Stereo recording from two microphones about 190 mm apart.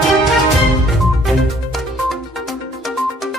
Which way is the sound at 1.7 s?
Centre (ahead or behind).